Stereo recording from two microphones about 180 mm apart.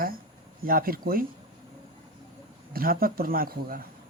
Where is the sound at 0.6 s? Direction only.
55° right (ahead or behind).